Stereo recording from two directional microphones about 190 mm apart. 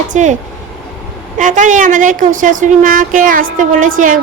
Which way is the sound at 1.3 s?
40° right (ahead or behind).